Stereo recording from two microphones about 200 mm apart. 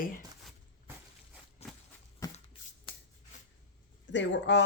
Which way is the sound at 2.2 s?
15° left (ahead or behind).